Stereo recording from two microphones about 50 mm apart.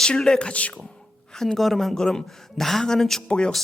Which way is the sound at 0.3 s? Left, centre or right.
Left.